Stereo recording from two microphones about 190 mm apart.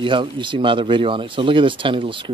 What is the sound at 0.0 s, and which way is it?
Speech, 25° right (ahead or behind).